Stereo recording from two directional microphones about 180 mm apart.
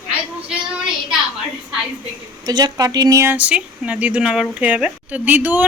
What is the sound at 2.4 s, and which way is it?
Speech, 20° right (ahead or behind).